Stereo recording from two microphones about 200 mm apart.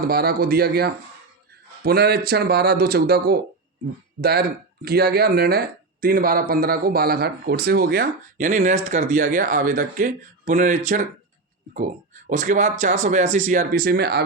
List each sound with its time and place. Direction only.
0.1 s speech: 50° right (ahead or behind)
12.3 s speech: 40° right (ahead or behind); by 14.3 s 55° right (ahead or behind)